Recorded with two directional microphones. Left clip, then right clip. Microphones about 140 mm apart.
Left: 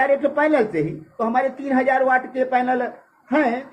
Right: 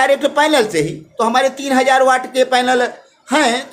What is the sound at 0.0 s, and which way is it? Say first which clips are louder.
A woman's voice: right 5 dB; 35° right (ahead or behind).